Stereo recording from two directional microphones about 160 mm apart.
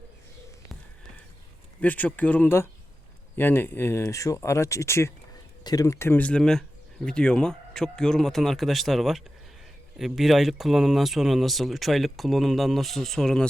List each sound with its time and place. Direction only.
1.8 s speech: 10° left (ahead or behind)